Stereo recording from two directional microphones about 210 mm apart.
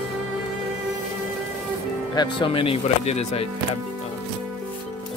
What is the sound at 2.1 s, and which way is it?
Speech, 25° left (ahead or behind).